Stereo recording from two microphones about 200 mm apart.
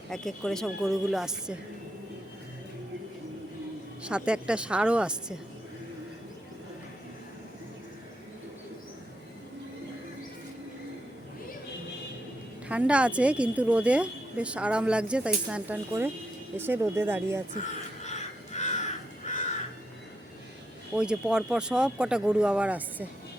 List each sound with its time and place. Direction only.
0.1 s a woman's voice: centre (ahead or behind)
4.0 s a woman's voice: 5° right (ahead or behind)
12.6 s a woman's voice: 5° right (ahead or behind)
18.0 s crow: 35° left (ahead or behind)
20.9 s a woman's voice: 5° right (ahead or behind)